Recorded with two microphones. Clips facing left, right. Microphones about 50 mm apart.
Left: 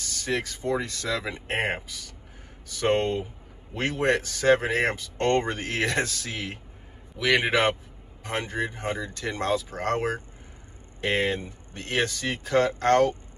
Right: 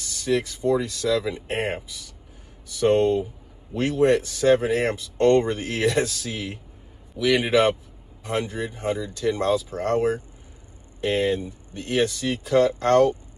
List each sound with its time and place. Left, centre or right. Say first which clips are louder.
0.0 s speech: right 5 dB; left